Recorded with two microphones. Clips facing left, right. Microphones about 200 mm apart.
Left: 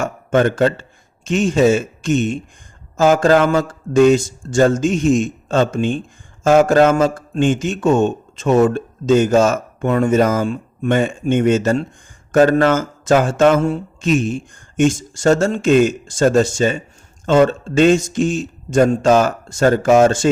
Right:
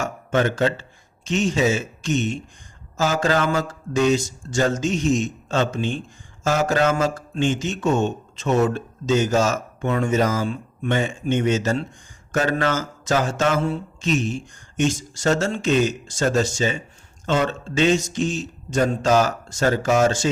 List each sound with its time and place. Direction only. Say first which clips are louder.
0.0 s speech: left 6 dB; 50° left (ahead or behind)